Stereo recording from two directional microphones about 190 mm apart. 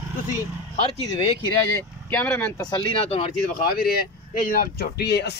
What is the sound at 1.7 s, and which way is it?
Speech, 10° left (ahead or behind).